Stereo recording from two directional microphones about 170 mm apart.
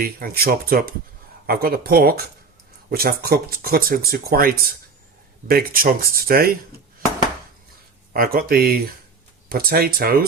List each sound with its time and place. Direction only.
0.0 s speech: 60° right (ahead or behind)
8.1 s speech: 60° right (ahead or behind)